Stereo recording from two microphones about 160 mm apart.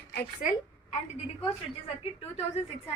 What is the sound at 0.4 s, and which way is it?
Speech, 55° left (ahead or behind).